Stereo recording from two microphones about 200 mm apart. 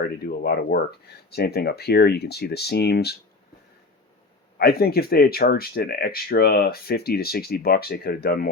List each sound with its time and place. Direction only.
0.0 s speech: 50° left (ahead or behind)
4.5 s speech: 50° left (ahead or behind)